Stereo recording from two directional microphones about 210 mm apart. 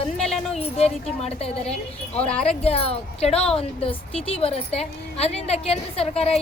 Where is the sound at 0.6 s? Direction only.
30° left (ahead or behind).